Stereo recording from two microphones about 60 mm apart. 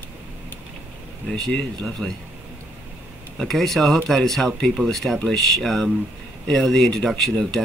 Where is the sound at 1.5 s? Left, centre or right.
Centre.